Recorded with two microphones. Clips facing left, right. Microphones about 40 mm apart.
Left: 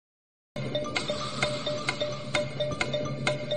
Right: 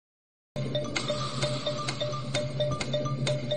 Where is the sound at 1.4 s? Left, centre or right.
Left.